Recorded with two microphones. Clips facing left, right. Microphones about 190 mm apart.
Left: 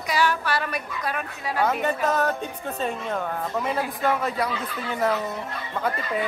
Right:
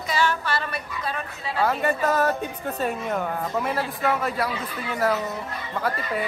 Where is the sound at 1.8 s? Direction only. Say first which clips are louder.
Right 1 dB; 5° right (ahead or behind).